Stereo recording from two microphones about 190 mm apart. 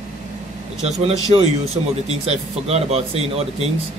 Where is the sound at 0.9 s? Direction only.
30° right (ahead or behind).